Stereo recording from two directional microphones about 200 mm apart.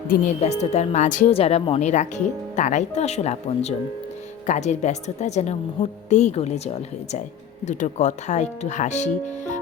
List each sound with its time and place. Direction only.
0.1 s a woman's voice: 35° left (ahead or behind)